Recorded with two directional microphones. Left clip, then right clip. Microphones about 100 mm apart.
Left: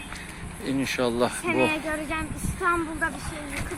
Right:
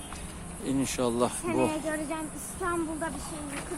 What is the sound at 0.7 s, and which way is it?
Speech, centre (ahead or behind).